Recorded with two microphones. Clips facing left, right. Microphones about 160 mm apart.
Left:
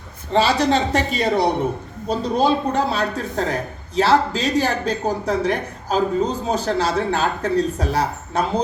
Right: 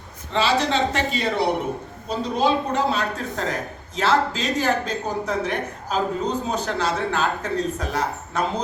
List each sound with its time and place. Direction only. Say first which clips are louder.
0.3 s a man's voice: left 3 dB; 40° left (ahead or behind)